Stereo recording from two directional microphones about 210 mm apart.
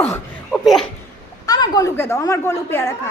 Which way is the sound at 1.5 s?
15° left (ahead or behind).